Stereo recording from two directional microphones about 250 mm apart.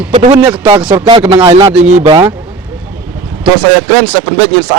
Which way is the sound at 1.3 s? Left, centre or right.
Centre.